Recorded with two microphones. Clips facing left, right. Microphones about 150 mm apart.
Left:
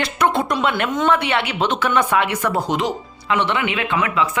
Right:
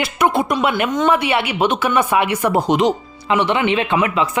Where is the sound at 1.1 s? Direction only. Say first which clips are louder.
Right 2 dB; 10° right (ahead or behind).